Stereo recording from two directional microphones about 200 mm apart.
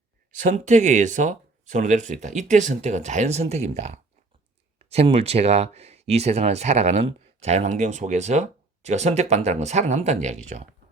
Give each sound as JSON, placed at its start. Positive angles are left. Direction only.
{"t": 0.3, "sound": "speech", "side_deg": -40}